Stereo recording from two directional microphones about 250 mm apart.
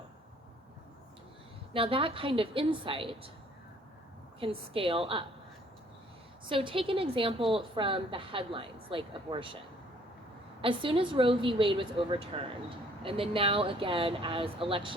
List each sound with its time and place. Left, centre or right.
1.7 s a woman's voice: right
4.4 s a woman's voice: right
6.5 s a woman's voice: right
10.6 s a woman's voice: right